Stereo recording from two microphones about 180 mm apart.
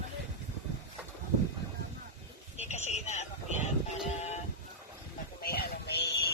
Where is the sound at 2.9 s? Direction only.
40° left (ahead or behind).